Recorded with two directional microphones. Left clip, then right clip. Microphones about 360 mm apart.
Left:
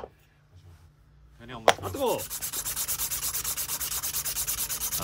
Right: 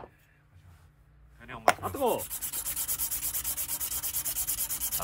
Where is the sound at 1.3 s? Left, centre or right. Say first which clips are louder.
Left 1 dB; centre.